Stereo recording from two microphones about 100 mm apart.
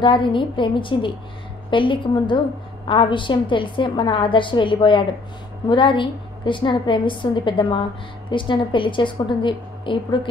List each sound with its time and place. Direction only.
0.0 s a woman's voice: 55° left (ahead or behind)